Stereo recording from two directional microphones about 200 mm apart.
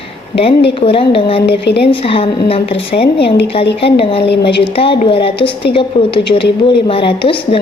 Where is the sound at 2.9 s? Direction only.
40° left (ahead or behind).